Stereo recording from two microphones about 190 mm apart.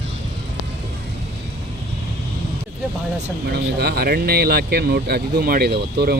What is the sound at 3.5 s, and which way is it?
Speech, 55° right (ahead or behind).